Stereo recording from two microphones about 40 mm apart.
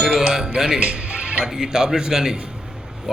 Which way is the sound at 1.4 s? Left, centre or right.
Centre.